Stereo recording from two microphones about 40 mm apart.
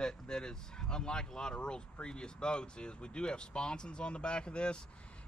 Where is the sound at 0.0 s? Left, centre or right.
Centre.